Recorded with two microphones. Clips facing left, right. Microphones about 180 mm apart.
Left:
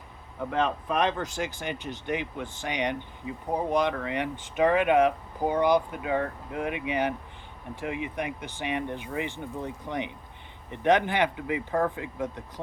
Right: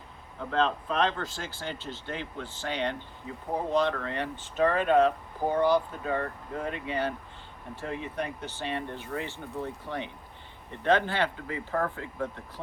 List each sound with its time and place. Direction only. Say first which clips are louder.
0.5 s speech: even; 15° left (ahead or behind)